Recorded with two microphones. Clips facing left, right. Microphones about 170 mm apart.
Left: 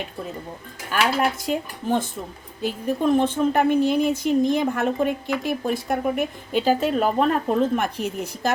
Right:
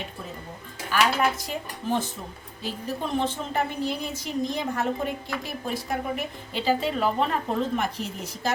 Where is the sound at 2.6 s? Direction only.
55° left (ahead or behind).